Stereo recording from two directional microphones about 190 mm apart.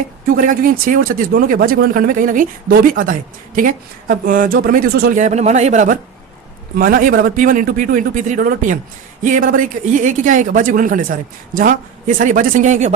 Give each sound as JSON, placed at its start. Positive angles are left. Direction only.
{"t": 0.3, "sound": "speech", "side_deg": -45}